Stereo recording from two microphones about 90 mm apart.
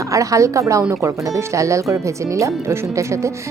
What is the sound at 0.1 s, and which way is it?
Speech, 35° right (ahead or behind).